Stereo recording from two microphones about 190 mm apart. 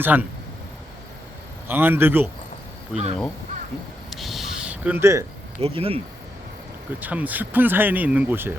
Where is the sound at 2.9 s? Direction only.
35° right (ahead or behind).